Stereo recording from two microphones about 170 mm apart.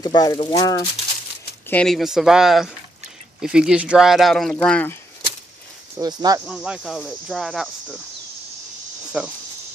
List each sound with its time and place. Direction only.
0.0 s speech: 25° left (ahead or behind)
1.7 s speech: 5° left (ahead or behind)
5.9 s speech: 20° right (ahead or behind)
6.4 s speech: 5° right (ahead or behind)
9.1 s speech: 10° right (ahead or behind)